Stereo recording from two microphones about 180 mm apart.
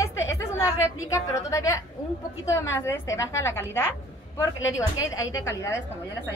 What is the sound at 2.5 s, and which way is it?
Speech, 90° left.